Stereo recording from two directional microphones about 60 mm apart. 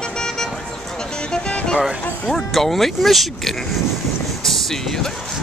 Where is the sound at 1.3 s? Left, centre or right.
Centre.